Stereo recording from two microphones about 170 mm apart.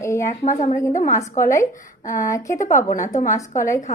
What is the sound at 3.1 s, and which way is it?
Speech, 45° left (ahead or behind).